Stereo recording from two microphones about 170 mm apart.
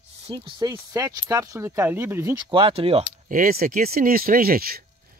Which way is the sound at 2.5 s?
30° right (ahead or behind).